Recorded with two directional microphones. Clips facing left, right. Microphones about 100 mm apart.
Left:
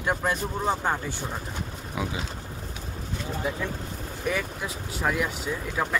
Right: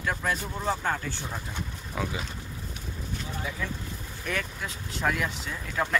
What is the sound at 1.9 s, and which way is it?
Speech, 10° left (ahead or behind).